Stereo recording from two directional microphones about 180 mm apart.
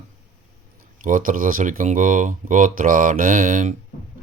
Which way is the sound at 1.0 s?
50° right (ahead or behind).